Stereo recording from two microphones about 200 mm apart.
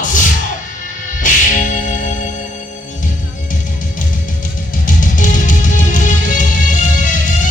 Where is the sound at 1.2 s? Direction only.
40° left (ahead or behind).